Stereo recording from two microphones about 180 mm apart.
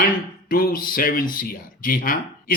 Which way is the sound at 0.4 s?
55° left (ahead or behind).